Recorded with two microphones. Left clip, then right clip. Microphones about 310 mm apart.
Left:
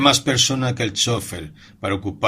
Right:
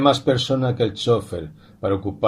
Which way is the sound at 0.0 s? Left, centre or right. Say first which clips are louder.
Left 1 dB; left.